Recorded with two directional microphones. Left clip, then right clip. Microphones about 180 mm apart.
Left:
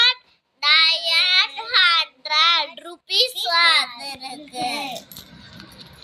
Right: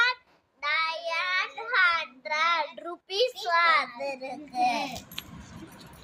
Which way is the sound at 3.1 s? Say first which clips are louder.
Left 7 dB; 20° right (ahead or behind).